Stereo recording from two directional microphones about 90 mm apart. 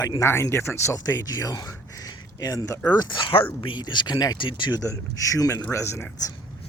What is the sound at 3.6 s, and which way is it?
Speech, 60° left (ahead or behind).